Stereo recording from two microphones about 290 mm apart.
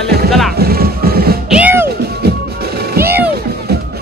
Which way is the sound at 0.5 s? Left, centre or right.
Right.